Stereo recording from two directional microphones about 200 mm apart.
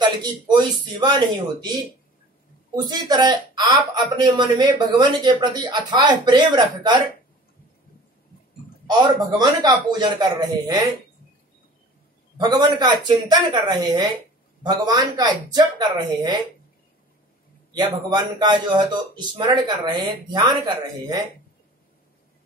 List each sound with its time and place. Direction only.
0.0 s speech: 20° right (ahead or behind)
2.7 s speech: 20° right (ahead or behind)
8.8 s speech: 20° right (ahead or behind)
12.4 s speech: 20° right (ahead or behind)
17.7 s speech: 20° right (ahead or behind)